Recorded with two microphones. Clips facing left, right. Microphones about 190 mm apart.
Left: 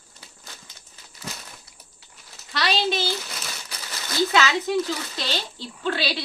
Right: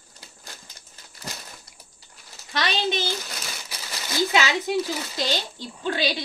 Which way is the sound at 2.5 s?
15° right (ahead or behind).